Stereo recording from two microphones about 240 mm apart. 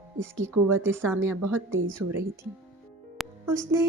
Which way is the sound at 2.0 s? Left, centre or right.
Right.